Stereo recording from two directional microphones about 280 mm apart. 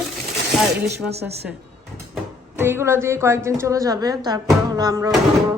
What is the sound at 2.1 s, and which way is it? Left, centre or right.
Speech, centre.